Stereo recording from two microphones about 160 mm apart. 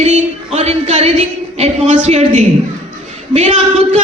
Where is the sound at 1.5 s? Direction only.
40° right (ahead or behind).